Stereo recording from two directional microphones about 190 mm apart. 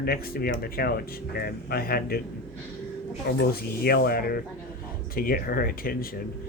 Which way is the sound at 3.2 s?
55° left (ahead or behind).